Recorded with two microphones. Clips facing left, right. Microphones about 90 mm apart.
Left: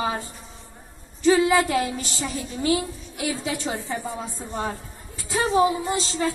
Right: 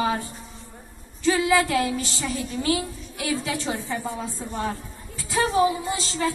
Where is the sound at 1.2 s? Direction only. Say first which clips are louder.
Left 2 dB; 25° left (ahead or behind).